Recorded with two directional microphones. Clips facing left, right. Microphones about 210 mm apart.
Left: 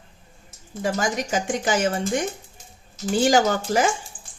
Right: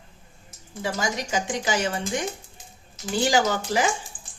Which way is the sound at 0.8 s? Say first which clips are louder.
Left 4 dB; 50° left (ahead or behind).